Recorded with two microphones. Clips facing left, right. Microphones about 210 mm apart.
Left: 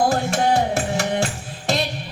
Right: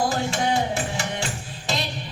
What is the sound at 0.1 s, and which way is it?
Music, 55° left (ahead or behind).